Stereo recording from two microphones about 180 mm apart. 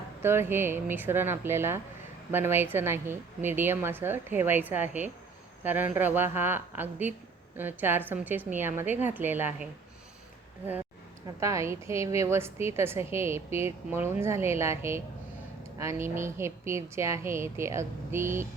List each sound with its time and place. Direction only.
0.2 s a woman's voice: 15° right (ahead or behind)
11.3 s a woman's voice: 15° right (ahead or behind)